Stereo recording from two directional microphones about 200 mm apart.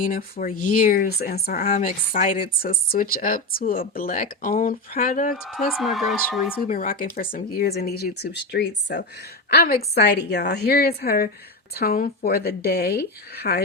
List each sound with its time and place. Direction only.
0.0 s speech: 45° left (ahead or behind)
1.6 s speech: 35° left (ahead or behind)
5.7 s speech: centre (ahead or behind)
6.6 s speech: 45° left (ahead or behind)